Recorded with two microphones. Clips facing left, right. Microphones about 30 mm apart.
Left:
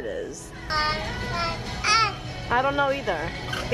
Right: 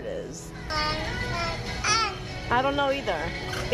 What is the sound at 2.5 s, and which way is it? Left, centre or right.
Speech, centre.